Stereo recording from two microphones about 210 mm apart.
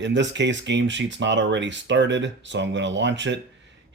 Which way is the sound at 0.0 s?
60° right (ahead or behind).